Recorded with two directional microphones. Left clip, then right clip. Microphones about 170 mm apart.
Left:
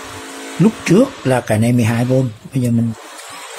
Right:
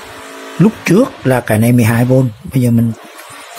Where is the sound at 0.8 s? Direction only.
20° right (ahead or behind).